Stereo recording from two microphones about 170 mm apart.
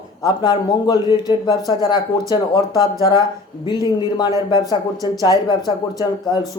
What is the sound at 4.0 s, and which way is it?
Speech, 30° left (ahead or behind).